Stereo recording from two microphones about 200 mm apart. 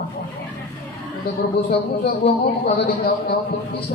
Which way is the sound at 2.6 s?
50° left (ahead or behind).